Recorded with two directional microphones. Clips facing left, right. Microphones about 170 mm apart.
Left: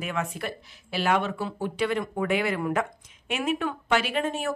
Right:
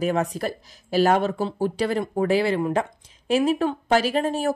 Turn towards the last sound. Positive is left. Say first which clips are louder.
# right 5 dB
turn(degrees=-35)  # may be behind; listen again after turning